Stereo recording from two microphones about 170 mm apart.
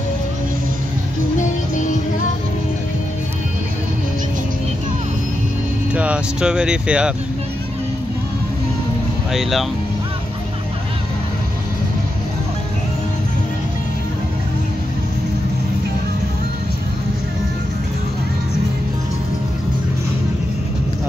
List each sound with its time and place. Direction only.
1.4 s music: 45° left (ahead or behind)
5.9 s speech: 5° right (ahead or behind)
9.3 s speech: centre (ahead or behind)